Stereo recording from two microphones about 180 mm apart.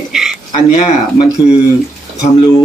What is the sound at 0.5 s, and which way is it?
Speech, 35° left (ahead or behind).